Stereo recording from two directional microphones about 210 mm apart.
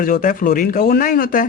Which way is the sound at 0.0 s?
40° left (ahead or behind).